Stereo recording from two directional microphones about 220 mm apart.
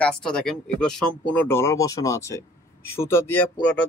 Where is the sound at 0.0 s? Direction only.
5° left (ahead or behind).